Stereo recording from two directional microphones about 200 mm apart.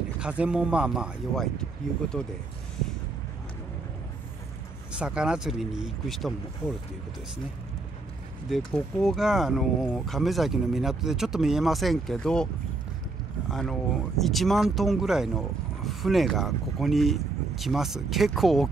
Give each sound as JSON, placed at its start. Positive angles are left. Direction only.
{"t": 0.2, "sound": "speech", "side_deg": -5}
{"t": 4.9, "sound": "speech", "side_deg": -5}
{"t": 8.5, "sound": "speech", "side_deg": 0}
{"t": 13.5, "sound": "speech", "side_deg": 0}